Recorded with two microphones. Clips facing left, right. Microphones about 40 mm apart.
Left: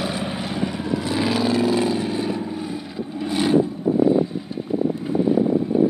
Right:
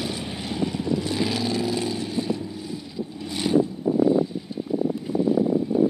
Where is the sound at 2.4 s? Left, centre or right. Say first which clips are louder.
Left 5 dB; left.